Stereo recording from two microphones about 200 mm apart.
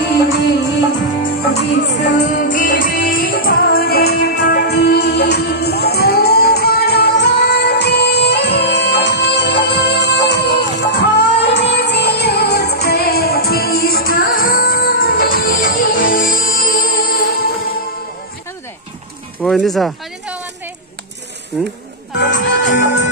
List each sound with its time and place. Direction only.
1.5 s music: 60° left (ahead or behind)
2.2 s music: 40° left (ahead or behind)
19.5 s a sound: centre (ahead or behind)
22.1 s music: 60° left (ahead or behind)